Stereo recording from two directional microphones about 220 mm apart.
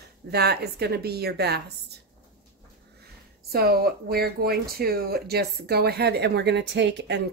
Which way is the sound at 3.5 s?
45° right (ahead or behind).